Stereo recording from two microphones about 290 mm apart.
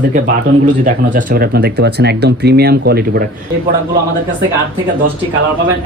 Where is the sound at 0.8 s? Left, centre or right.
Right.